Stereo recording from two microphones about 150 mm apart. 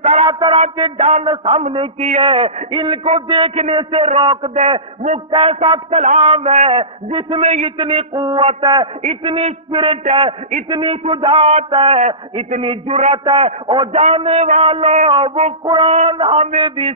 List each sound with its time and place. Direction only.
0.0 s a man's voice: 40° right (ahead or behind)